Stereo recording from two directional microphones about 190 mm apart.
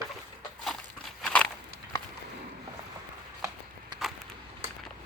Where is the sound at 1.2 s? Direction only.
5° left (ahead or behind).